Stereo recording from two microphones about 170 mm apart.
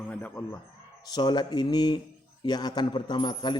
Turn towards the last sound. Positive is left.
turn(degrees=25)  # may be behind; listen again after turning